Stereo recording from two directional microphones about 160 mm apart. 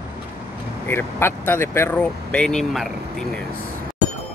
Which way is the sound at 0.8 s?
15° left (ahead or behind).